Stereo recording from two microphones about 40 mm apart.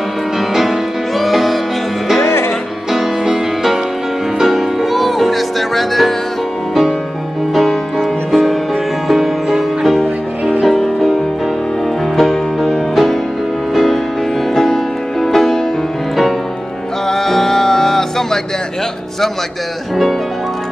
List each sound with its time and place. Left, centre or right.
1.1 s music: centre
2.2 s music: left
2.9 s music: centre
7.5 s music: centre
12.2 s music: centre
14.5 s music: centre
17.1 s music: centre